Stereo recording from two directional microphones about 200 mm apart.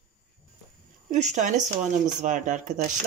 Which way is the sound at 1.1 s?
35° right (ahead or behind).